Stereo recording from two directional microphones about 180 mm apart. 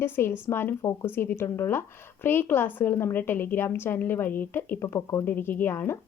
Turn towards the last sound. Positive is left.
turn(degrees=10)  # may be behind; listen again after turning